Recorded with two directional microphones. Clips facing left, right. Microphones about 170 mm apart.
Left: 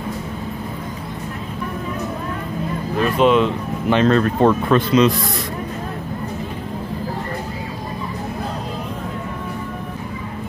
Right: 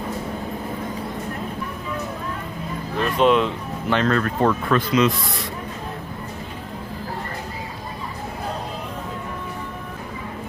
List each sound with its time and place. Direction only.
3.0 s speech: centre (ahead or behind)
3.9 s speech: 25° left (ahead or behind)